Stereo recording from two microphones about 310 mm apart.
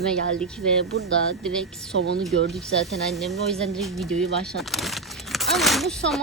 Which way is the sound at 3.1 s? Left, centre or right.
Centre.